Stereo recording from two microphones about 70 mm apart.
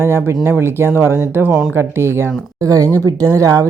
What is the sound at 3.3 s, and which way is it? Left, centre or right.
Speech, right.